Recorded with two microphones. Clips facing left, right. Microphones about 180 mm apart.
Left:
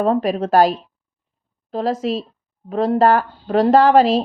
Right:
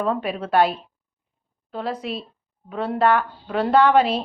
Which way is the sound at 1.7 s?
40° left (ahead or behind).